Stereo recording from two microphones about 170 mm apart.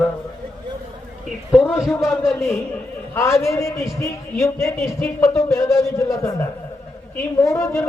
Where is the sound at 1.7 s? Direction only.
5° right (ahead or behind).